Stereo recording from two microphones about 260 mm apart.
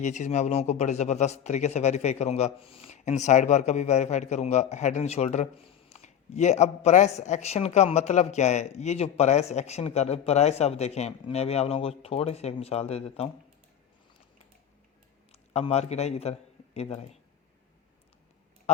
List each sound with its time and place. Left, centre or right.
0.0 s speech: left
15.3 s speech: left